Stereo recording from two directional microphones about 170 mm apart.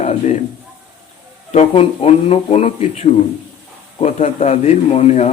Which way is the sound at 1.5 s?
40° left (ahead or behind).